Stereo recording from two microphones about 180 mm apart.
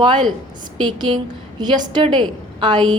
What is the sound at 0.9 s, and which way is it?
A woman's voice, 25° right (ahead or behind).